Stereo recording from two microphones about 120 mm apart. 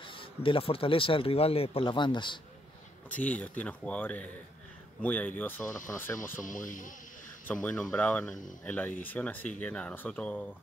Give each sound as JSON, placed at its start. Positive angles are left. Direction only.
{"t": 0.0, "sound": "speech", "side_deg": 45}
{"t": 3.1, "sound": "speech", "side_deg": 10}
{"t": 6.4, "sound": "speech", "side_deg": 90}
{"t": 7.4, "sound": "speech", "side_deg": 10}